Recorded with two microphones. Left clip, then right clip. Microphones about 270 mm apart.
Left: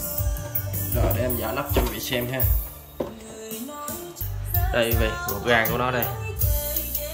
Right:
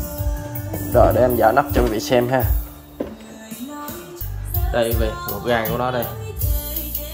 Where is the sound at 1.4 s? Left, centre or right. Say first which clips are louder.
Right 11 dB; centre.